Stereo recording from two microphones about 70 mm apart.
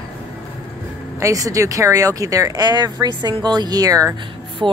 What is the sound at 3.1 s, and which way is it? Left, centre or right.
Speech, right.